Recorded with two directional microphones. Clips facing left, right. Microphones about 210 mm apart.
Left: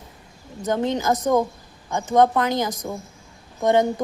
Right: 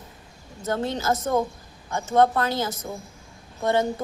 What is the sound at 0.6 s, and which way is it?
A woman's voice, 15° left (ahead or behind).